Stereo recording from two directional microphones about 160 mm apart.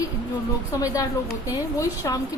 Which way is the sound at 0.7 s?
20° left (ahead or behind).